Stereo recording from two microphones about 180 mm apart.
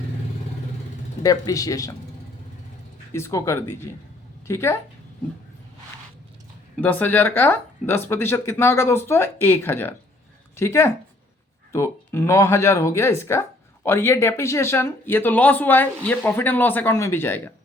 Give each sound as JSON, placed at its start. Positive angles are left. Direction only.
{"t": 1.2, "sound": "speech", "side_deg": 20}
{"t": 3.1, "sound": "speech", "side_deg": 15}
{"t": 6.8, "sound": "speech", "side_deg": 10}